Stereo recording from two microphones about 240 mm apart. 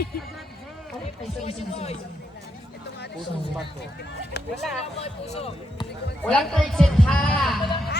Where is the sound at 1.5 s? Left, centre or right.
Left.